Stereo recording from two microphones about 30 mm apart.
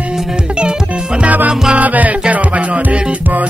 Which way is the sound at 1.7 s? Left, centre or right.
Right.